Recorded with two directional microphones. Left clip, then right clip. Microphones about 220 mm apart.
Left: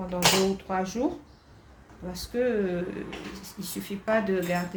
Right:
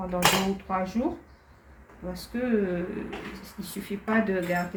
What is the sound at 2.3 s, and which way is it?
Speech, 55° left (ahead or behind).